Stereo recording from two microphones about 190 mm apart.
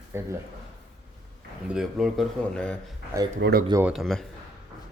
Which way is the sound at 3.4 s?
60° right (ahead or behind).